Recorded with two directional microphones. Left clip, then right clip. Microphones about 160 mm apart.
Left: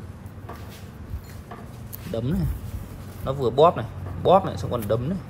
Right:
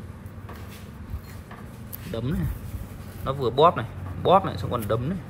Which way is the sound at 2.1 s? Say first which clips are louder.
Left 3 dB; 25° left (ahead or behind).